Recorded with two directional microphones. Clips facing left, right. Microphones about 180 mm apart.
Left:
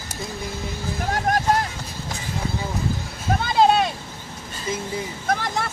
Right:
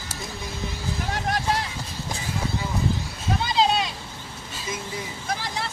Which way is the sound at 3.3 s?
55° left (ahead or behind).